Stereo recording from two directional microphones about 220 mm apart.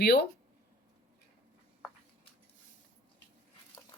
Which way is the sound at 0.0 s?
50° left (ahead or behind).